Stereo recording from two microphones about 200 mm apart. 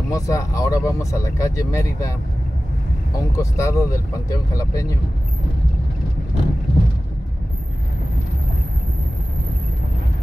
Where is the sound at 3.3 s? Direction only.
15° left (ahead or behind).